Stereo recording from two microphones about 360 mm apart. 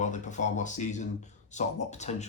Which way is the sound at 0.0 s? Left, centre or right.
Centre.